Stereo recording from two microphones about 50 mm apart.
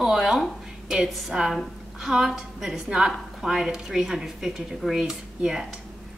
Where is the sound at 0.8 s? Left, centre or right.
Centre.